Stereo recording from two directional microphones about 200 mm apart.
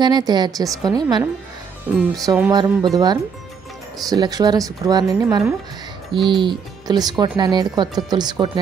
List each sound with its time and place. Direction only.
0.0 s speech: 20° right (ahead or behind)
2.2 s music: 10° right (ahead or behind)
2.5 s speech: 20° right (ahead or behind)